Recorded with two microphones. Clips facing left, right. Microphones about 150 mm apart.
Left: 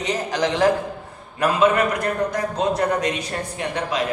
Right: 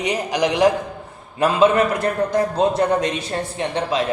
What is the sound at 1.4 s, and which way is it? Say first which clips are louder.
A woman's voice: right 2 dB; 25° right (ahead or behind).